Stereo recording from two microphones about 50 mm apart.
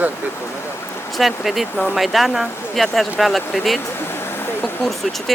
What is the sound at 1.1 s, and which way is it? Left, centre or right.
Speech, centre.